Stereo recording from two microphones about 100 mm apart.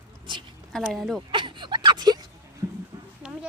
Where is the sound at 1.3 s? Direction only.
50° right (ahead or behind).